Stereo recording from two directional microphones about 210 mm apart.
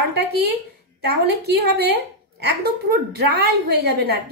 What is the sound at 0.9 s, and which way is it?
A woman's voice, 50° right (ahead or behind).